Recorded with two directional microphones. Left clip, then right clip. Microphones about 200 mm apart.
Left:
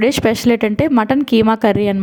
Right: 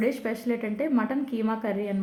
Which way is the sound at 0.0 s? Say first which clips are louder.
Left 14 dB; 45° left (ahead or behind).